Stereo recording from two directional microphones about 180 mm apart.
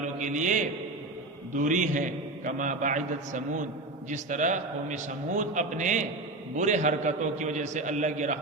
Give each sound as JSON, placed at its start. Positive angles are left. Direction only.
{"t": 0.2, "sound": "a man's voice", "side_deg": -45}